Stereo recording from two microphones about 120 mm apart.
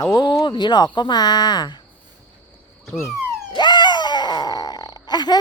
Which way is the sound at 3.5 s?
35° left (ahead or behind).